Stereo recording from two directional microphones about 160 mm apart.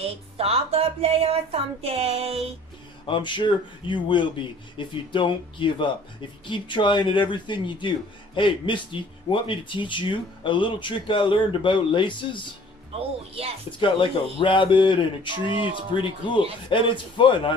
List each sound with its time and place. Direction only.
0.0 s speech: 40° right (ahead or behind)
3.1 s speech: 30° left (ahead or behind)
12.9 s speech: 40° right (ahead or behind)
13.7 s speech: 30° left (ahead or behind)